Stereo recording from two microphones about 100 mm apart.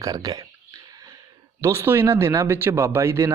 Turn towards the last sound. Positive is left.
turn(degrees=-30)  # may be behind; listen again after turning